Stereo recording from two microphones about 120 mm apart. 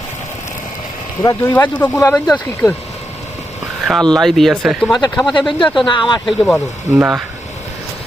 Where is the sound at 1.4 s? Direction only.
15° left (ahead or behind).